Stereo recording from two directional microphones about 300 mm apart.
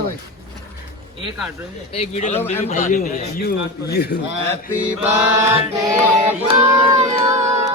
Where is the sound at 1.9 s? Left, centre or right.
Left.